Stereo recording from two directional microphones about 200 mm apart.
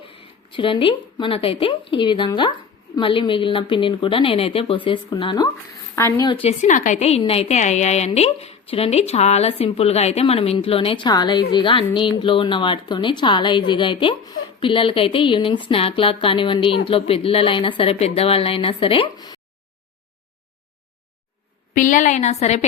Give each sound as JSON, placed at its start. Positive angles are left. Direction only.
{"t": 0.1, "sound": "a woman's voice", "side_deg": 25}
{"t": 21.8, "sound": "a woman's voice", "side_deg": 40}